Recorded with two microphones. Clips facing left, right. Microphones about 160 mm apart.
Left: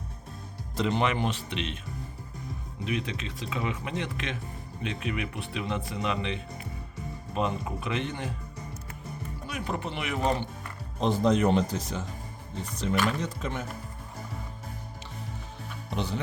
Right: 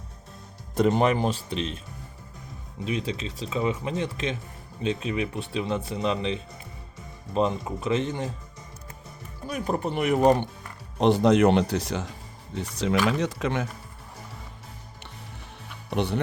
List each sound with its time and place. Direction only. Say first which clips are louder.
0.8 s speech: right 5 dB; 45° right (ahead or behind)
2.8 s speech: right 3 dB; 30° right (ahead or behind)
9.5 s speech: right 6 dB; 40° right (ahead or behind)
11.0 s speech: right 5 dB; 75° right (ahead or behind)
12.5 s speech: right 4 dB; 90° right
15.9 s speech: right 6 dB; 65° right (ahead or behind)